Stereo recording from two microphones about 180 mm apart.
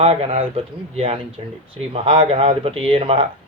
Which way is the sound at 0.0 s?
35° right (ahead or behind).